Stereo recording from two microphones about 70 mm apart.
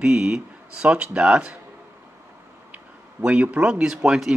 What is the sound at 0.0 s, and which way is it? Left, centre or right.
Speech, centre.